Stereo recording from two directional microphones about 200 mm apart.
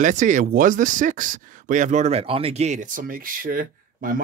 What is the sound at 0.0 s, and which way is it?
Speech, 40° right (ahead or behind).